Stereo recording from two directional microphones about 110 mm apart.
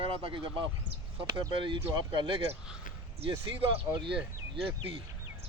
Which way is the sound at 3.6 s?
60° right (ahead or behind).